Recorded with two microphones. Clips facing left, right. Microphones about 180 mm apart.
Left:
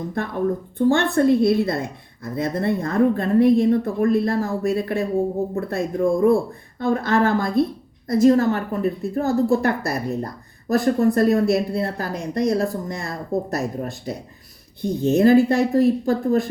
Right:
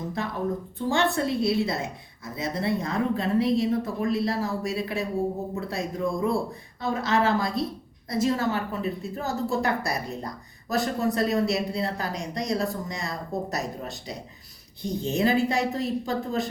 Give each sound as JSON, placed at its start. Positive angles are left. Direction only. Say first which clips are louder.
{"t": 0.9, "sound": "a woman's voice", "louder": "left 8 dB", "side_deg": 55}